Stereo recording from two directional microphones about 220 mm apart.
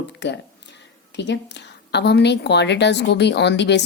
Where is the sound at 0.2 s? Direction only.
50° left (ahead or behind).